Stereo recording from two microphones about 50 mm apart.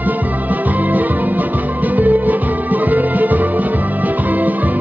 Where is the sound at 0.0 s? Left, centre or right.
Right.